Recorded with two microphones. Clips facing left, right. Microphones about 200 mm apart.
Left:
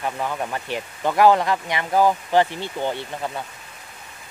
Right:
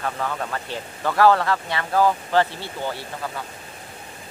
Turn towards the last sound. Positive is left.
turn(degrees=25)  # may be behind; listen again after turning